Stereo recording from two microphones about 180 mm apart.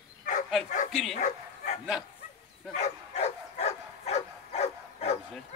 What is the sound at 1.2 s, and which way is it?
Bow-wow, 40° left (ahead or behind).